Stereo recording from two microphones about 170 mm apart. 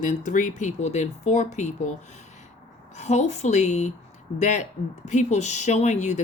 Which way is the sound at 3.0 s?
40° left (ahead or behind).